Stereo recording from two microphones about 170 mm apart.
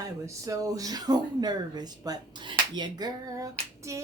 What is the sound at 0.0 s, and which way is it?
Speech, 20° right (ahead or behind).